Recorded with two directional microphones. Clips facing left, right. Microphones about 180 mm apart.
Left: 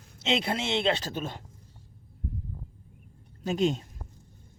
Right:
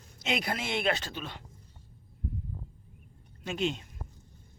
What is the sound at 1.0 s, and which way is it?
Speech, 45° left (ahead or behind).